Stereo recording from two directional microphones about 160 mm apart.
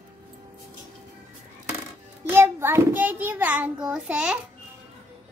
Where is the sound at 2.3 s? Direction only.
15° right (ahead or behind).